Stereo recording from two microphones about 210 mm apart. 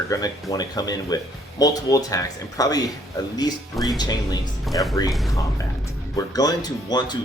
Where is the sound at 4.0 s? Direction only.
20° left (ahead or behind).